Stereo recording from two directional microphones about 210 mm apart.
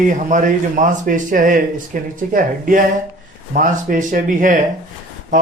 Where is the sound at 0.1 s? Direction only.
35° right (ahead or behind).